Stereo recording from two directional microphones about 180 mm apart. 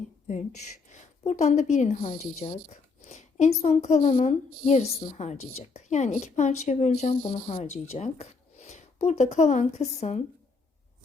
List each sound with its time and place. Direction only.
0.9 s a woman's voice: 40° left (ahead or behind)